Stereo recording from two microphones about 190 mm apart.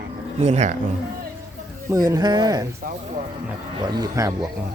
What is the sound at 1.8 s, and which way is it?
Speech, 15° right (ahead or behind).